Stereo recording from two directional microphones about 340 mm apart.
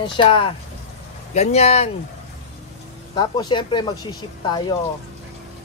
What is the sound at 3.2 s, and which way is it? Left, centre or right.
Speech, centre.